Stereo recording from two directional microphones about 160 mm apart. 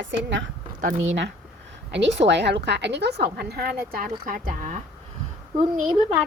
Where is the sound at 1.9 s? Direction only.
90° right.